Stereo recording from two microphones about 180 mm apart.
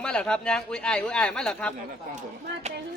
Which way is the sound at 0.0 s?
5° left (ahead or behind).